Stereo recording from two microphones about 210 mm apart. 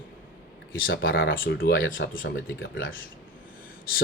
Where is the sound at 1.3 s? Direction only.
55° left (ahead or behind).